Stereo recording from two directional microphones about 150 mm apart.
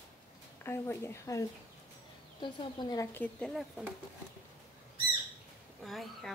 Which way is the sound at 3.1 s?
5° left (ahead or behind).